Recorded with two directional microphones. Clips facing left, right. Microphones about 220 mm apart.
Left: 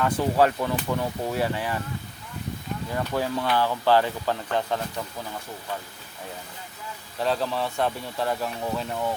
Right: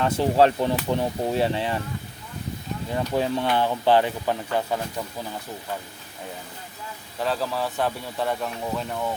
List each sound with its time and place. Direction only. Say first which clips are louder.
0.0 s speech: right 2 dB; 25° right (ahead or behind)
2.9 s speech: right 3 dB; 20° right (ahead or behind)
7.2 s speech: even; centre (ahead or behind)